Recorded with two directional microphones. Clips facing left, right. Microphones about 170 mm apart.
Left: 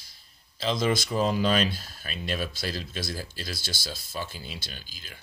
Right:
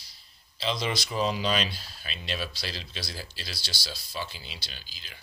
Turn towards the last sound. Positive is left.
turn(degrees=50)  # may be behind; listen again after turning